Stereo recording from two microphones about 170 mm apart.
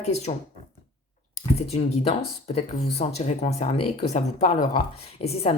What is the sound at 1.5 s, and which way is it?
Speech, 40° left (ahead or behind).